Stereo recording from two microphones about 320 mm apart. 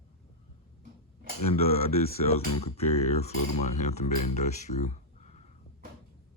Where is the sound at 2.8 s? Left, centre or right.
Left.